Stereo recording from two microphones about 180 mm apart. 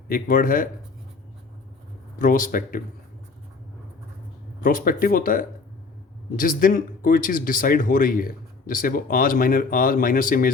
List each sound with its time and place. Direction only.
0.1 s speech: 50° left (ahead or behind)
2.1 s speech: 50° left (ahead or behind)
4.6 s speech: 50° left (ahead or behind)